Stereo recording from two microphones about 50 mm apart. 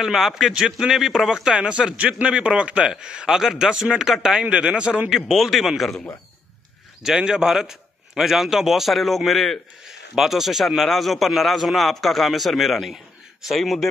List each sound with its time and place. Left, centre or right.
0.0 s a man's voice: centre; by 5.1 s right
5.1 s a man's voice: centre
7.1 s a man's voice: centre